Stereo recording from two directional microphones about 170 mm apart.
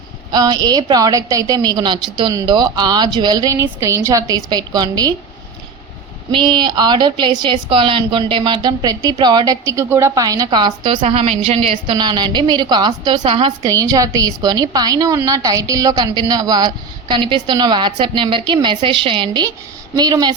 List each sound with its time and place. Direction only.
0.3 s a woman's voice: 25° right (ahead or behind)
6.3 s a woman's voice: 25° right (ahead or behind)
13.6 s a woman's voice: 20° right (ahead or behind)